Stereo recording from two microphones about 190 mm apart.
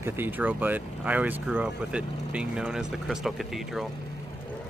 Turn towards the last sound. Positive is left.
turn(degrees=0)  # may be behind; listen again after turning